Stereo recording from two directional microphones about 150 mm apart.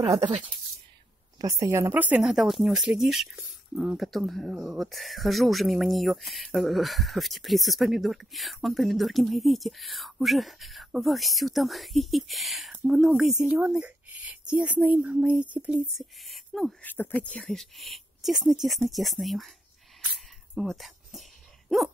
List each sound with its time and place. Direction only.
0.0 s speech: 30° right (ahead or behind); by 16.7 s centre (ahead or behind)
16.8 s speech: 10° left (ahead or behind)
20.5 s a sound: centre (ahead or behind)